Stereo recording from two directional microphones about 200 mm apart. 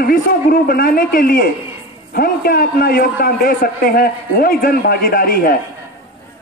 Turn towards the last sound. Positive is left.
turn(degrees=45)  # may be behind; listen again after turning